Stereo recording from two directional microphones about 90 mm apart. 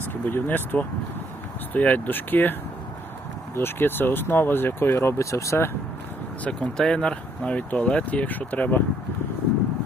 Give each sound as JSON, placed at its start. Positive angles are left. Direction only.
{"t": 0.3, "sound": "speech", "side_deg": 20}
{"t": 6.4, "sound": "speech", "side_deg": 10}